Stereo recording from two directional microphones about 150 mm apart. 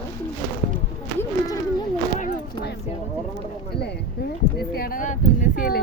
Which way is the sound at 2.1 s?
75° left (ahead or behind).